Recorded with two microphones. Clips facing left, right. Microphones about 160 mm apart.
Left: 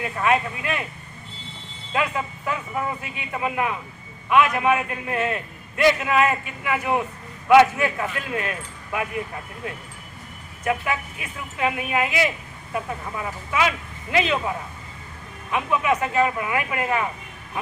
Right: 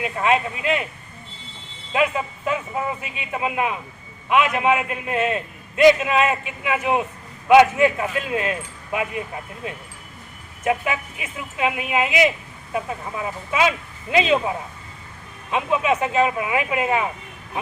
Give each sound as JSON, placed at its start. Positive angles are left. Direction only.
{"t": 0.0, "sound": "a man's voice", "side_deg": -20}
{"t": 1.9, "sound": "a man's voice", "side_deg": -20}